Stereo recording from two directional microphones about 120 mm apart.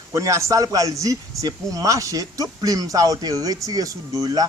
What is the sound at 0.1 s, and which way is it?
A man's voice, 25° right (ahead or behind).